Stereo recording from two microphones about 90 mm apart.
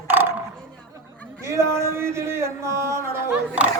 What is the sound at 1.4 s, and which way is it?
Speech, 30° right (ahead or behind).